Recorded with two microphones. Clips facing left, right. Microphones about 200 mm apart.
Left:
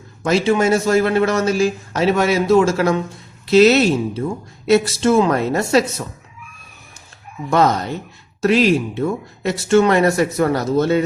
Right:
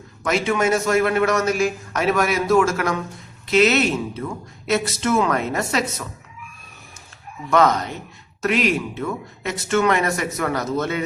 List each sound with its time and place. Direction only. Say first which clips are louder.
0.2 s a woman's voice: left 5 dB; 30° left (ahead or behind)
7.5 s a woman's voice: left 2 dB; 35° left (ahead or behind)